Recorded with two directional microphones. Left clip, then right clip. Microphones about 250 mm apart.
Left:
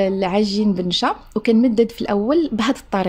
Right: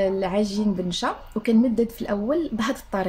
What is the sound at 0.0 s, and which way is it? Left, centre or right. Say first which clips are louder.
A woman's voice: left 4 dB; left.